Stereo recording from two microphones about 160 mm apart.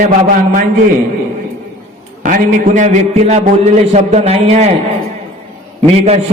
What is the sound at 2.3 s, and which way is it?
A man's voice, 55° right (ahead or behind).